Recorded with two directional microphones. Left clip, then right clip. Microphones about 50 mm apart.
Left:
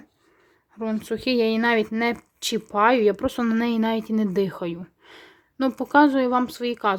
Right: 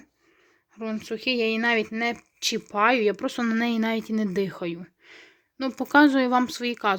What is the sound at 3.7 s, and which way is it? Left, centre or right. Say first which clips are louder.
Speech: left 2 dB; centre.